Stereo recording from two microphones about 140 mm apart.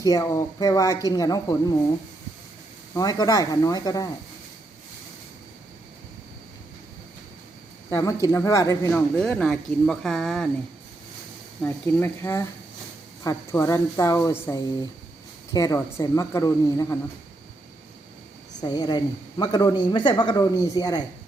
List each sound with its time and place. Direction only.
0.0 s speech: 25° left (ahead or behind)
2.9 s speech: 30° left (ahead or behind)
7.9 s speech: 25° left (ahead or behind)
8.9 s speech: 10° left (ahead or behind)
11.6 s speech: 15° left (ahead or behind)
18.6 s speech: 30° left (ahead or behind)